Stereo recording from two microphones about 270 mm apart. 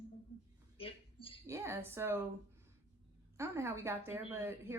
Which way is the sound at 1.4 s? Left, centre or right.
Centre.